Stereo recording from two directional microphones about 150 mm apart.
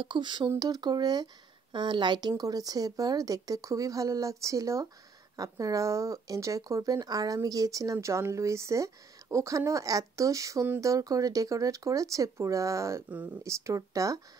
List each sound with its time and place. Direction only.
0.0 s speech: 30° right (ahead or behind)